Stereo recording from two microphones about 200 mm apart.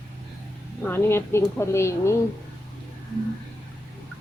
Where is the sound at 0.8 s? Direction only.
10° left (ahead or behind).